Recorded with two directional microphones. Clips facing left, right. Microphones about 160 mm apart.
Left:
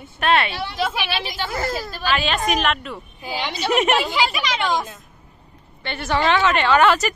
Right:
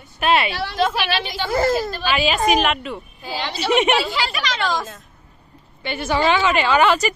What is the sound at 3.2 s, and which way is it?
Speech, 15° left (ahead or behind).